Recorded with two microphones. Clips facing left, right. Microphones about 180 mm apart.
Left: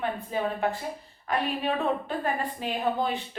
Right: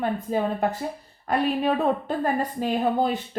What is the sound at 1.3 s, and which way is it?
Speech, 40° right (ahead or behind).